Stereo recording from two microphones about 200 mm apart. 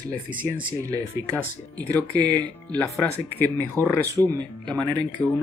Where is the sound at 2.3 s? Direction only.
10° left (ahead or behind).